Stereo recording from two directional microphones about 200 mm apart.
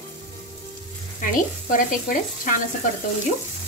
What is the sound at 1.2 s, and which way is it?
Speech, 40° left (ahead or behind).